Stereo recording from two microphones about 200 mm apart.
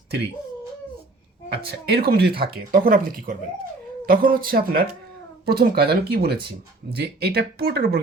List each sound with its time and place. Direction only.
1.5 s speech: 55° right (ahead or behind)